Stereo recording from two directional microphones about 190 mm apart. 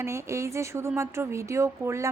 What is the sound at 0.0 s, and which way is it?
A woman's voice, 15° right (ahead or behind).